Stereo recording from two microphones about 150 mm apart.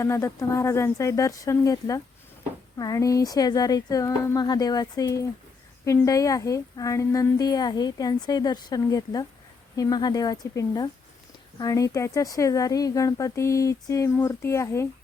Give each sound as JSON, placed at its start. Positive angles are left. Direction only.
{"t": 0.0, "sound": "a woman's voice", "side_deg": 20}